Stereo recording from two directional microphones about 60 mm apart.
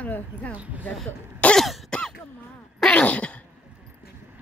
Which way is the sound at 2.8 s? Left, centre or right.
Left.